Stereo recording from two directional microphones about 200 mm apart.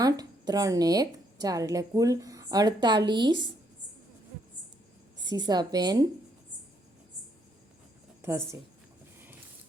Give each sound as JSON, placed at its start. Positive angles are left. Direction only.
{"t": 0.0, "sound": "a woman's voice", "side_deg": -20}
{"t": 5.3, "sound": "a woman's voice", "side_deg": -20}
{"t": 8.2, "sound": "a woman's voice", "side_deg": -15}